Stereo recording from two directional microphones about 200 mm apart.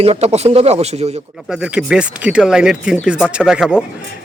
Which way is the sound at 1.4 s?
5° right (ahead or behind).